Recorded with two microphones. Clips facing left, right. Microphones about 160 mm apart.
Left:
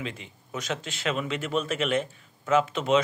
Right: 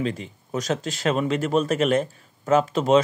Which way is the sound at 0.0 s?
40° right (ahead or behind).